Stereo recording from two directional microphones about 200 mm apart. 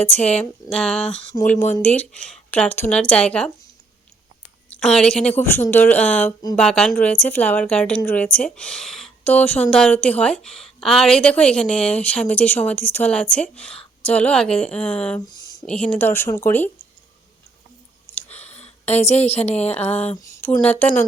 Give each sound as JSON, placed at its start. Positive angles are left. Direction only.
{"t": 0.0, "sound": "a woman's voice", "side_deg": 10}
{"t": 4.7, "sound": "a woman's voice", "side_deg": 5}
{"t": 18.0, "sound": "clicking", "side_deg": 10}
{"t": 18.9, "sound": "a woman's voice", "side_deg": 30}
{"t": 19.5, "sound": "a woman's voice", "side_deg": 10}